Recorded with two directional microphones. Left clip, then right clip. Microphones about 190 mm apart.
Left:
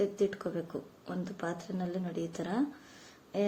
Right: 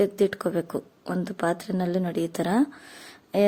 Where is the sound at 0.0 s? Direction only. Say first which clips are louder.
Right 8 dB; 50° right (ahead or behind).